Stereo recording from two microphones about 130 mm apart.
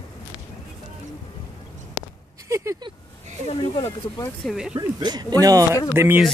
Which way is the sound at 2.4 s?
25° right (ahead or behind).